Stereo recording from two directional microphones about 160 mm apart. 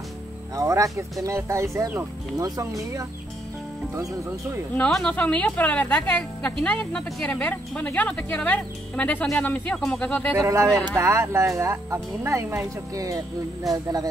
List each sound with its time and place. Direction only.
0.6 s speech: 20° right (ahead or behind)
4.7 s speech: 5° left (ahead or behind)
10.3 s speech: 20° right (ahead or behind)